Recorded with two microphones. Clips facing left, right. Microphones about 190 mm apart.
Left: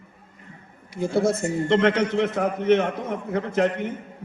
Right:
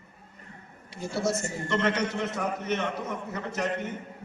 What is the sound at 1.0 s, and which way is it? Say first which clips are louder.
A man's voice: left 7 dB; 55° left (ahead or behind).